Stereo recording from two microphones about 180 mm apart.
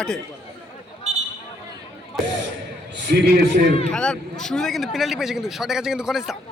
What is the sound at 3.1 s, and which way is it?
Music, 60° right (ahead or behind).